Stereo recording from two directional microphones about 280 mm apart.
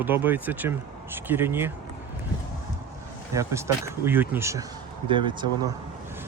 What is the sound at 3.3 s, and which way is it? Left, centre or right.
Speech, centre.